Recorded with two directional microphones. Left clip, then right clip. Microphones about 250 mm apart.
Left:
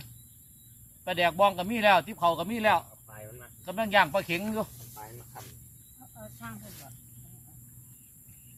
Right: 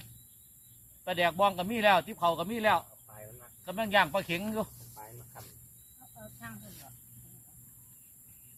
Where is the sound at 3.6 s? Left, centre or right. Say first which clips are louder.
Left 3 dB; centre.